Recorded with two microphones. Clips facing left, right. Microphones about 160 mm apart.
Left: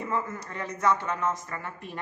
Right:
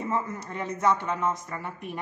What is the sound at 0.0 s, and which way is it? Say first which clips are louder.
A woman's voice: right 1 dB; 20° right (ahead or behind).